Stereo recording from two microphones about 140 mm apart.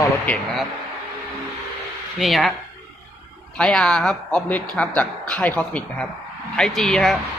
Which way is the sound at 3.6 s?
5° left (ahead or behind).